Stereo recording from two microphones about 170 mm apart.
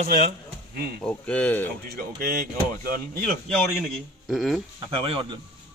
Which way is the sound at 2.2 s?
55° right (ahead or behind).